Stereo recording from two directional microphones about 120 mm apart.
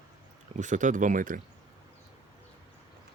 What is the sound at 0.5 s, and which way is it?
Speech, 90° right.